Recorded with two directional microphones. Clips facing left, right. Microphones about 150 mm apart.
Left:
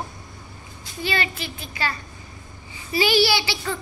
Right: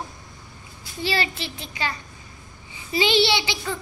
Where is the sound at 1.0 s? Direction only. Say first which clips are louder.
Right 1 dB; 30° right (ahead or behind).